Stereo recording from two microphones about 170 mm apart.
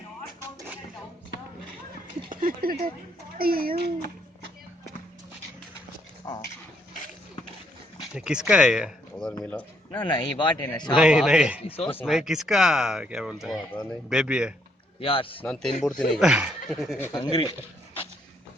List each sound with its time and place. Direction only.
0.3 s a sound: 15° right (ahead or behind)
2.3 s speech: 55° right (ahead or behind)
6.3 s speech: 25° left (ahead or behind)
8.1 s speech: 5° right (ahead or behind)
9.9 s speech: 25° left (ahead or behind)
10.9 s speech: 5° right (ahead or behind)
11.6 s speech: 35° left (ahead or behind)
12.0 s speech: 5° right (ahead or behind)
15.0 s speech: 30° left (ahead or behind)
15.4 s speech: 5° left (ahead or behind)
17.0 s speech: 20° left (ahead or behind)